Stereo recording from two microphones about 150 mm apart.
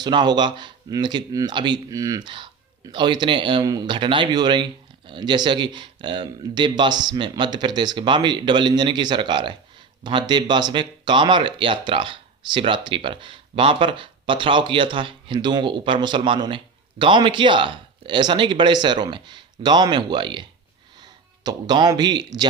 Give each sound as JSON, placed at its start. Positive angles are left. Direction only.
{"t": 0.0, "sound": "speech", "side_deg": -30}